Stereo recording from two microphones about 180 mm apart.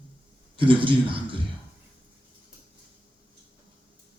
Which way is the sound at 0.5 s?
30° right (ahead or behind).